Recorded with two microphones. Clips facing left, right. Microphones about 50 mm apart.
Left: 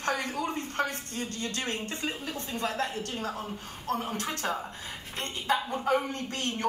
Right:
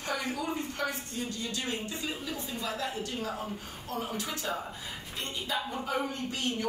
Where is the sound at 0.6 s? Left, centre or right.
Left.